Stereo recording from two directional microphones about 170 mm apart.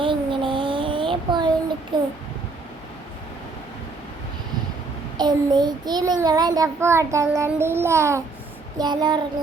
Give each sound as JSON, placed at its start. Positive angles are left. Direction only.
{"t": 0.0, "sound": "a sound", "side_deg": -30}
{"t": 1.9, "sound": "child singing", "side_deg": -25}
{"t": 5.1, "sound": "child singing", "side_deg": -25}